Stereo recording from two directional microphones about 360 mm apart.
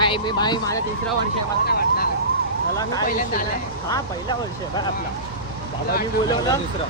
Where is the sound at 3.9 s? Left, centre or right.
Centre.